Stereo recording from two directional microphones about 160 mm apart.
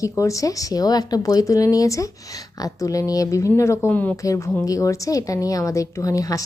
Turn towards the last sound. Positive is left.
turn(degrees=20)  # may be behind; listen again after turning